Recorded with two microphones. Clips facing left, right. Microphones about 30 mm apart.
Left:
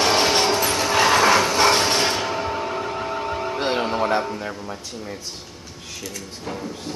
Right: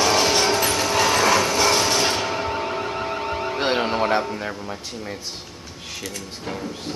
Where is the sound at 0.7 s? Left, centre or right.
Left.